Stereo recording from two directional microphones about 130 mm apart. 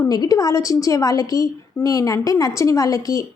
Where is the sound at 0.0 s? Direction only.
25° left (ahead or behind).